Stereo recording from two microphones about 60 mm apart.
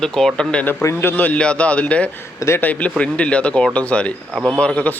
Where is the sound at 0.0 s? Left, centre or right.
Centre.